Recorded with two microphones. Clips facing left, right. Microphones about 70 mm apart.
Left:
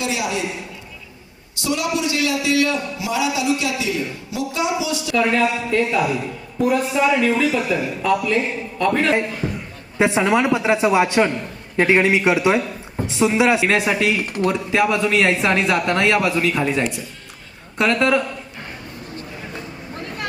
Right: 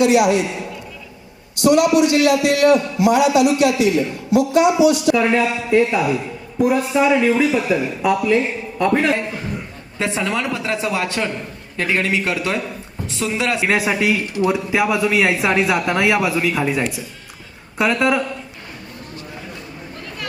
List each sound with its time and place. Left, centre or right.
0.0 s a man's voice: right
1.6 s a man's voice: right
5.1 s speech: centre
10.0 s a man's voice: centre
13.7 s speech: centre